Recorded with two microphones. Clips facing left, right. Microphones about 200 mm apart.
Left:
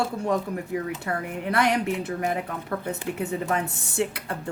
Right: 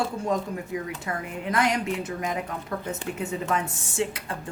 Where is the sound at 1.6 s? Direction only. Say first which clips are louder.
Left 2 dB; 60° left (ahead or behind).